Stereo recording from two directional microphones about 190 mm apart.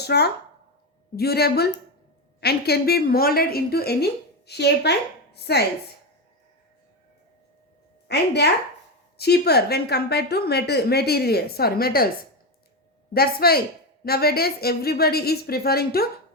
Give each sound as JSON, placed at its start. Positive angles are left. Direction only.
{"t": 0.0, "sound": "a woman's voice", "side_deg": 60}
{"t": 8.0, "sound": "a woman's voice", "side_deg": 60}
{"t": 13.1, "sound": "a woman's voice", "side_deg": 55}